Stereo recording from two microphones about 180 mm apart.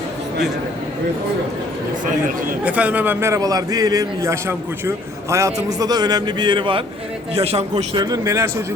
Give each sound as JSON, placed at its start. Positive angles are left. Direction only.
{"t": 2.6, "sound": "a man's voice", "side_deg": -10}
{"t": 8.1, "sound": "a man's voice", "side_deg": -20}